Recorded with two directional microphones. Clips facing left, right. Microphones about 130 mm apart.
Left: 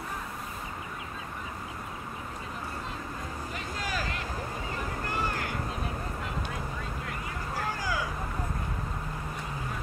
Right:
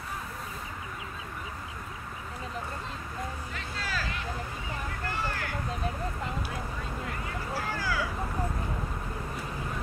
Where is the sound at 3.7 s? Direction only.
15° left (ahead or behind).